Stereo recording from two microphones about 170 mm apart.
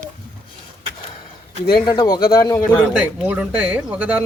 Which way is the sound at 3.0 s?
5° right (ahead or behind).